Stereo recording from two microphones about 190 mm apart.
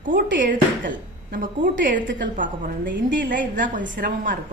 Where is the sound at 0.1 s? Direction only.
70° right (ahead or behind).